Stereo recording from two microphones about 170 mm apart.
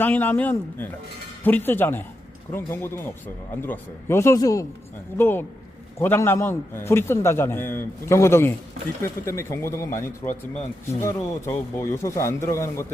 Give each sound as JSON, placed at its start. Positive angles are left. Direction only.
{"t": 0.0, "sound": "a man's voice", "side_deg": 10}